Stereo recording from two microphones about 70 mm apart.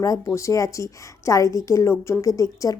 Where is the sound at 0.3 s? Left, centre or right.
Left.